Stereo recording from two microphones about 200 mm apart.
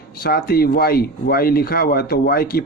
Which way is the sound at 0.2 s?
50° left (ahead or behind).